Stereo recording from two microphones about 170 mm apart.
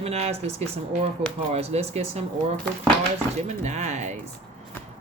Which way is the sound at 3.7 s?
45° right (ahead or behind).